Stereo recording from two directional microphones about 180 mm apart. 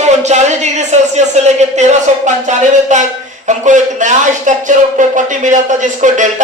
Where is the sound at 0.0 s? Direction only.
40° right (ahead or behind).